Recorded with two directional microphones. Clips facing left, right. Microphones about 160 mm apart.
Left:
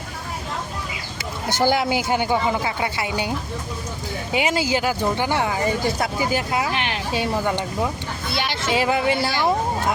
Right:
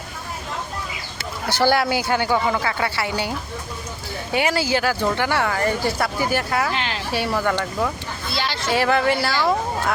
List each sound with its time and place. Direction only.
1.5 s speech: 20° left (ahead or behind)